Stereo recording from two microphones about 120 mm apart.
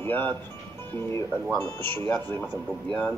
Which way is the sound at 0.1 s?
15° left (ahead or behind).